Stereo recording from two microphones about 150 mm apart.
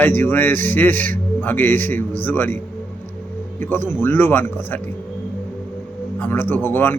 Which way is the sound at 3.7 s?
15° left (ahead or behind).